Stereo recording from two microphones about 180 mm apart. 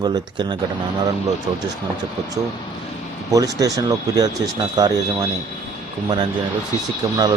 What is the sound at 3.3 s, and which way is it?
Speech, 20° right (ahead or behind).